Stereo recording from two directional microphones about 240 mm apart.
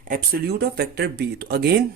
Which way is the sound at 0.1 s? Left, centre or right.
Right.